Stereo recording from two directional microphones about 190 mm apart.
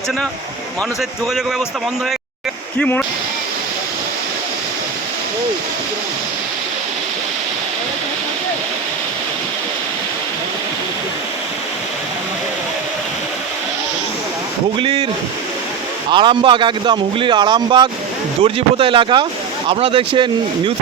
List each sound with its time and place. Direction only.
2.7 s speech: 5° left (ahead or behind)
14.8 s speech: 25° right (ahead or behind)
16.1 s speech: 25° right (ahead or behind)